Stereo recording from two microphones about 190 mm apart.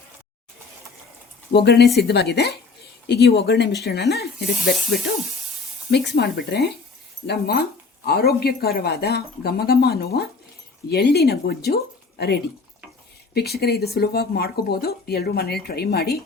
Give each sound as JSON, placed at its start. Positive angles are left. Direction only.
{"t": 1.5, "sound": "speech", "side_deg": 60}
{"t": 5.9, "sound": "speech", "side_deg": 60}